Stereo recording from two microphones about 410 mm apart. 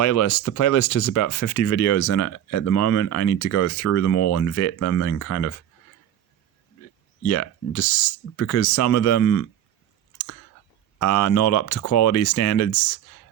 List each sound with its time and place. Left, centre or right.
0.0 s speech: left
7.3 s speech: left
10.9 s speech: left